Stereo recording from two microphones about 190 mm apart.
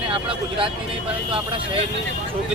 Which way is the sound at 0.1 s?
30° right (ahead or behind).